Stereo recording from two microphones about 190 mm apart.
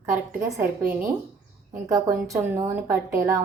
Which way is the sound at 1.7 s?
15° right (ahead or behind).